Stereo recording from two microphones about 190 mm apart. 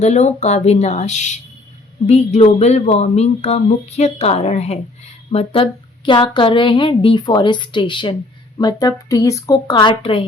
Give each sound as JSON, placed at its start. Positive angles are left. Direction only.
{"t": 0.0, "sound": "a woman's voice", "side_deg": 35}